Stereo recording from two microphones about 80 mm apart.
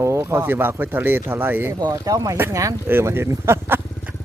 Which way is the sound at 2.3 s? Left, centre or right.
Right.